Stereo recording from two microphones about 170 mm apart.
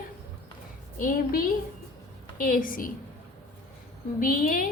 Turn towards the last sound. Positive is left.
turn(degrees=55)  # may be behind; listen again after turning